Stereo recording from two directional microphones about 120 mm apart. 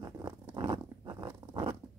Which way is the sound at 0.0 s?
35° right (ahead or behind).